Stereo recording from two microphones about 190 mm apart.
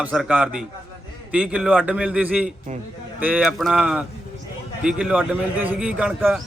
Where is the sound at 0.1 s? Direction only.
5° right (ahead or behind).